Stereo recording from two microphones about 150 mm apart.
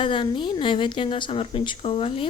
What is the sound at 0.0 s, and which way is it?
Speech, 35° left (ahead or behind).